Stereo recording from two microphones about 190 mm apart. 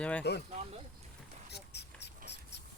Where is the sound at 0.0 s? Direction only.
5° left (ahead or behind).